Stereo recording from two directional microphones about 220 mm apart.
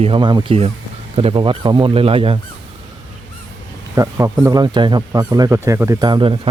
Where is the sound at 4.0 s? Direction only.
15° right (ahead or behind).